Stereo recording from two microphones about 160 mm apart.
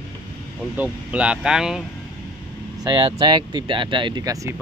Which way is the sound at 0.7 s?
10° right (ahead or behind).